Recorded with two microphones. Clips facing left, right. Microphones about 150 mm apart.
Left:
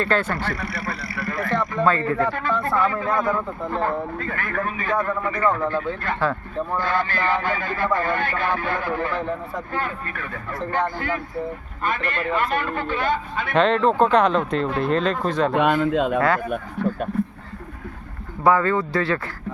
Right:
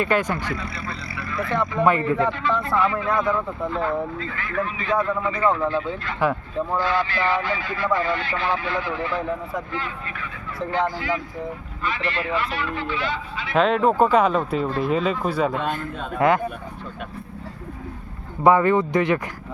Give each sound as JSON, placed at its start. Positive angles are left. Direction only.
{"t": 0.0, "sound": "speech", "side_deg": -15}
{"t": 0.6, "sound": "speech", "side_deg": 60}
{"t": 1.8, "sound": "speech", "side_deg": -15}
{"t": 2.3, "sound": "speech", "side_deg": 50}
{"t": 5.4, "sound": "speech", "side_deg": -20}
{"t": 6.8, "sound": "speech", "side_deg": 50}
{"t": 13.5, "sound": "speech", "side_deg": -5}
{"t": 15.5, "sound": "a man's voice", "side_deg": 75}
{"t": 18.4, "sound": "speech", "side_deg": -20}